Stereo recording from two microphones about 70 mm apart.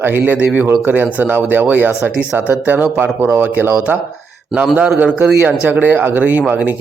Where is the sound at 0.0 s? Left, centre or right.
Right.